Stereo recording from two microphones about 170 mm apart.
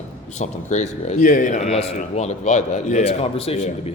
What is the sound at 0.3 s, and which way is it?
Speech, 45° left (ahead or behind).